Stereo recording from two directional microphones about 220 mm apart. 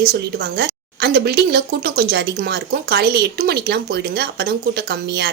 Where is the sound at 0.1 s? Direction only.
50° right (ahead or behind).